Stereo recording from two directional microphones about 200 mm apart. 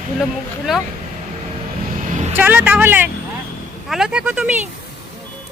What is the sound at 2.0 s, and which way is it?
Vehicle, 35° right (ahead or behind).